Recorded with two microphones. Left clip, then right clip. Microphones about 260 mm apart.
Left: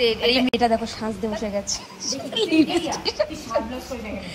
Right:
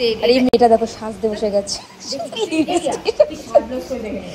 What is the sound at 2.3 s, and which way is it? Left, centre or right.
Speech, centre.